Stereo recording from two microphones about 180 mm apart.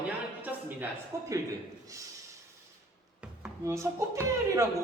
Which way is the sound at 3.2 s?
15° right (ahead or behind).